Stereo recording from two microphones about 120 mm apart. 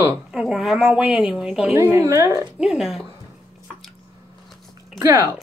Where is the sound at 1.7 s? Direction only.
25° right (ahead or behind).